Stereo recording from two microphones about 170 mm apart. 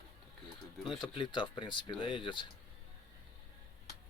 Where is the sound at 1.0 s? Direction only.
30° left (ahead or behind).